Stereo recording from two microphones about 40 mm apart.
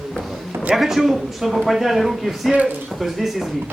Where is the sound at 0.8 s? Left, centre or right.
Centre.